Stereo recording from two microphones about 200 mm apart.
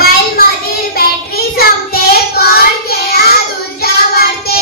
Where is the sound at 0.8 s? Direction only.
50° left (ahead or behind).